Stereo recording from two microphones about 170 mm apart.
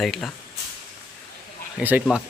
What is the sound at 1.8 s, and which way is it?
Speech, 10° right (ahead or behind).